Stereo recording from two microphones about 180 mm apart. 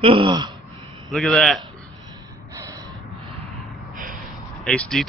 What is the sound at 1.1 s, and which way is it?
Speech, centre (ahead or behind).